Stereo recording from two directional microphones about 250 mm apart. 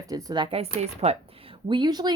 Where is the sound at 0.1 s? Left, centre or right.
Centre.